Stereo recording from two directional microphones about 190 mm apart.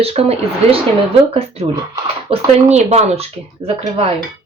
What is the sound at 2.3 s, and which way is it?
Speech, 35° right (ahead or behind).